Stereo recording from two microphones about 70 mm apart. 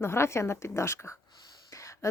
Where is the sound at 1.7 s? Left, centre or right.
Left.